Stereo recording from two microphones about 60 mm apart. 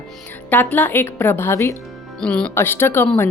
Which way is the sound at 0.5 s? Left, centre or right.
Left.